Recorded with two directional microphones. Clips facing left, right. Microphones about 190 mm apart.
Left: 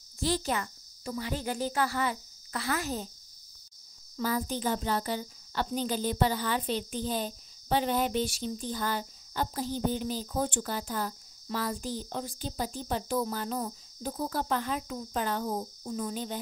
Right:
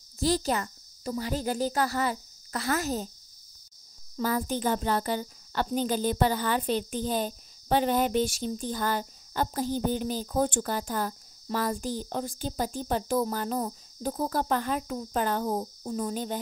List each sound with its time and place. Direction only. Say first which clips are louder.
0.2 s speech: right 3 dB; 40° right (ahead or behind)
4.2 s speech: right 3 dB; 50° right (ahead or behind)